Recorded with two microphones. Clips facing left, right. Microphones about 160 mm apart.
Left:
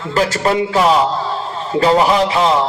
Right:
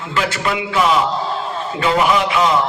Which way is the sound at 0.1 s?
40° left (ahead or behind).